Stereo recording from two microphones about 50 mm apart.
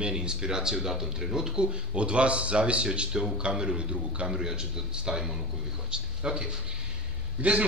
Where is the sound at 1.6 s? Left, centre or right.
Right.